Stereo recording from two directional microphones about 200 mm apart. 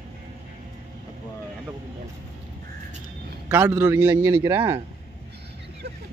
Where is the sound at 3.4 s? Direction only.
10° right (ahead or behind).